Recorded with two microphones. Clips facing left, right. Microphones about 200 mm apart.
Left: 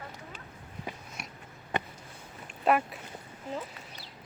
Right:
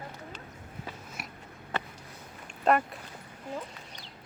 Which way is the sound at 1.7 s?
15° left (ahead or behind).